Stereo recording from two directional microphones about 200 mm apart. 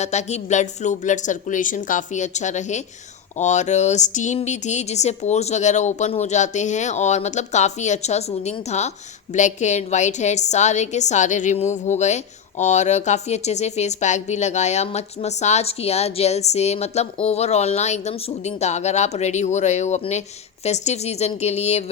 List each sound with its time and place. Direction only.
0.0 s a woman's voice: 35° left (ahead or behind)